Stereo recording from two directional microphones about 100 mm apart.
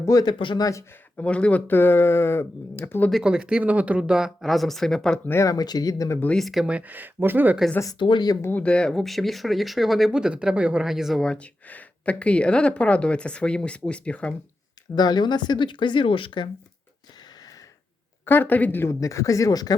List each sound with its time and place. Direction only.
0.0 s speech: 35° left (ahead or behind)
0.3 s speech: 55° left (ahead or behind)
0.6 s speech: 30° left (ahead or behind)
1.2 s speech: 10° left (ahead or behind)
3.1 s speech: 5° right (ahead or behind)
5.3 s speech: 30° left (ahead or behind)
6.3 s speech: centre (ahead or behind); by 7.6 s 20° right (ahead or behind)
7.9 s speech: 50° left (ahead or behind)
8.4 s speech: 20° left (ahead or behind)
8.6 s speech: 10° left (ahead or behind)
14.9 s speech: 45° left (ahead or behind)
18.3 s speech: 20° left (ahead or behind); by 19.7 s 40° left (ahead or behind)